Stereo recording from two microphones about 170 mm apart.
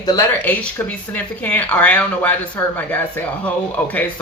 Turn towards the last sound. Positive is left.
turn(degrees=10)  # may be behind; listen again after turning